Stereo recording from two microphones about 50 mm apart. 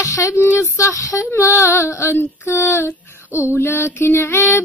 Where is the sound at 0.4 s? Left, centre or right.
Left.